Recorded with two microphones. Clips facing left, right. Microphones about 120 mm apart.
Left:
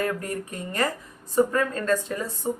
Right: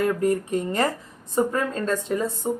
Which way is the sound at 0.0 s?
25° right (ahead or behind).